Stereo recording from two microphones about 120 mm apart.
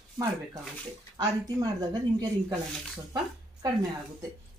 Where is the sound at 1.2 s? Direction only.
35° right (ahead or behind).